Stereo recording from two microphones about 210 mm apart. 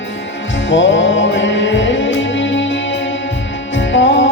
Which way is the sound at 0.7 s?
60° left (ahead or behind).